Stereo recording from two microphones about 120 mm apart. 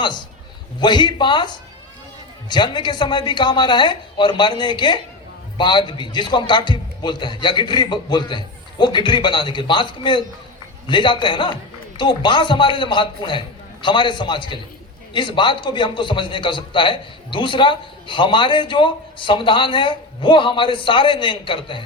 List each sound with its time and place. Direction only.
0.8 s a man's voice: 40° left (ahead or behind)